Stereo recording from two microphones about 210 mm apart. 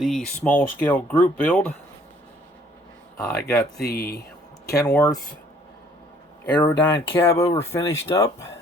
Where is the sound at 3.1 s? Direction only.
5° left (ahead or behind).